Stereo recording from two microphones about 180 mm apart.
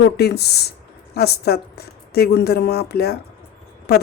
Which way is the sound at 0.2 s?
65° left (ahead or behind).